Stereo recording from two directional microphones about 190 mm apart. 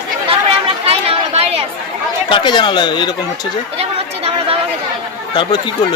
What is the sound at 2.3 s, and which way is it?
Speech, 25° left (ahead or behind).